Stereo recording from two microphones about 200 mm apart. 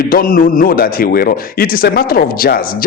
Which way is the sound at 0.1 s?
45° left (ahead or behind).